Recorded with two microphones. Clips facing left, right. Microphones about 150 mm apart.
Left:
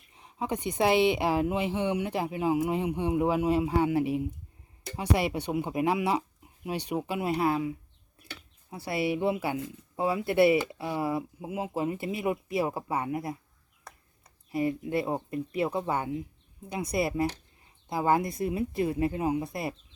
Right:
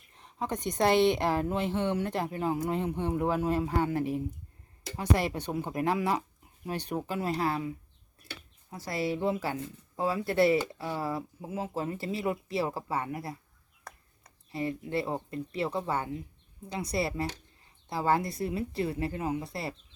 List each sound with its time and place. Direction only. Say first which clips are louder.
0.1 s speech: left 2 dB; 10° left (ahead or behind)
8.7 s speech: left 3 dB; 10° left (ahead or behind)
14.5 s speech: left 4 dB; 15° left (ahead or behind)